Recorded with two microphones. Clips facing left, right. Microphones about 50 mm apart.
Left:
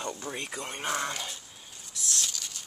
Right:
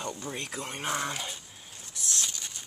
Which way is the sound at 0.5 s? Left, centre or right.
Centre.